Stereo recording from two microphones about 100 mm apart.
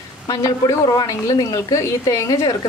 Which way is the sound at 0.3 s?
35° left (ahead or behind).